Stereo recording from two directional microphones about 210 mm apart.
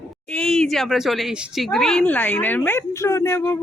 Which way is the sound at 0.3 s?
5° left (ahead or behind).